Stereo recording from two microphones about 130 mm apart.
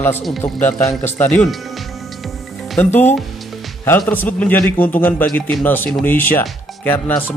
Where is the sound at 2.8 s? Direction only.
15° left (ahead or behind).